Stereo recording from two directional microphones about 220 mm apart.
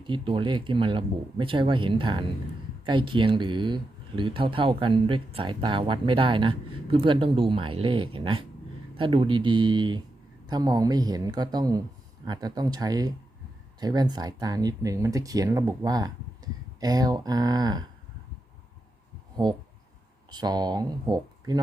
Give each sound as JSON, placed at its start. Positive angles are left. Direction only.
{"t": 0.0, "sound": "speech", "side_deg": -20}
{"t": 20.3, "sound": "speech", "side_deg": -20}